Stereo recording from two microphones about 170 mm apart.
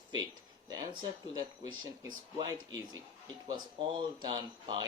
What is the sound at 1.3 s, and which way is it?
Speech, 25° right (ahead or behind).